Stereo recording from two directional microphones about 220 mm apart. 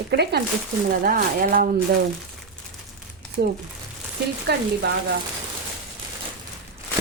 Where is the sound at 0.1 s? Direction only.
50° right (ahead or behind).